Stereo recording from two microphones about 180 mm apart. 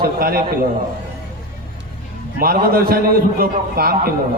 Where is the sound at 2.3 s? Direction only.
55° right (ahead or behind).